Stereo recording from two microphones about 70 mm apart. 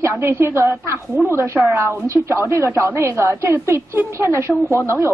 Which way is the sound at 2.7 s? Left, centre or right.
Right.